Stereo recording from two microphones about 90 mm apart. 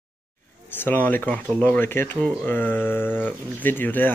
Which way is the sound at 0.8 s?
20° left (ahead or behind).